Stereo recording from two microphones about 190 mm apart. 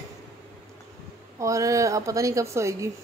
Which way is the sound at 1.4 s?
15° right (ahead or behind).